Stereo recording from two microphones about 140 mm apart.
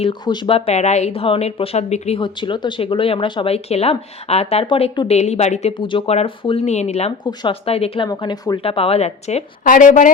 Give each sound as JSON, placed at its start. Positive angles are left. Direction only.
{"t": 0.0, "sound": "speech", "side_deg": 35}
{"t": 2.2, "sound": "speech", "side_deg": 35}
{"t": 4.6, "sound": "speech", "side_deg": 35}
{"t": 5.7, "sound": "speech", "side_deg": 35}
{"t": 7.3, "sound": "speech", "side_deg": 40}
{"t": 8.1, "sound": "speech", "side_deg": 30}
{"t": 9.6, "sound": "speech", "side_deg": 70}